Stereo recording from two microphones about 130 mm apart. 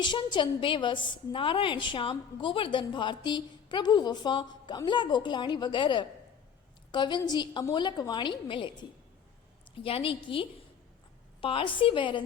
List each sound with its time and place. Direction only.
0.0 s a woman's voice: 35° left (ahead or behind)